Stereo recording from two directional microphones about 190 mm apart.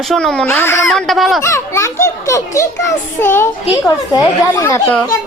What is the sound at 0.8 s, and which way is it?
Speech, centre (ahead or behind).